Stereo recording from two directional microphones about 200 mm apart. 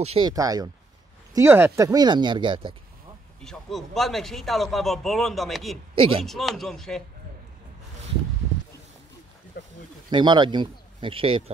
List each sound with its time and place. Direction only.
0.0 s speech: 30° right (ahead or behind)
0.3 s speech: 20° right (ahead or behind)
3.3 s a man's voice: centre (ahead or behind)
5.9 s speech: 25° right (ahead or behind)
6.2 s a man's voice: centre (ahead or behind)
9.6 s a sound: 50° left (ahead or behind)
10.0 s speech: 20° right (ahead or behind)